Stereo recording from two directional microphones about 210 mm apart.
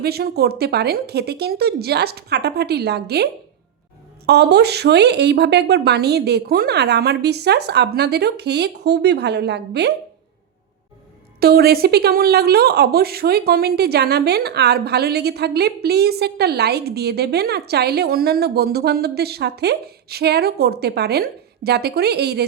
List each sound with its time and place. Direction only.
0.0 s speech: 50° right (ahead or behind)
4.3 s speech: 50° right (ahead or behind)
11.3 s speech: 50° right (ahead or behind)